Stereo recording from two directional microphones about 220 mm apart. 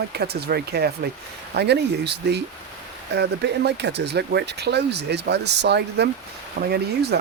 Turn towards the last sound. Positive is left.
turn(degrees=-45)  # may be behind; listen again after turning